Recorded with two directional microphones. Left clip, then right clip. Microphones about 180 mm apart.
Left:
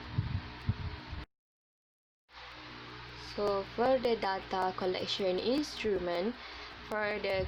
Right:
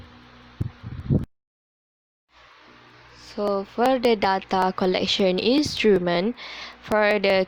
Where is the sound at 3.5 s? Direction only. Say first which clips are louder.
Right 8 dB; 45° right (ahead or behind).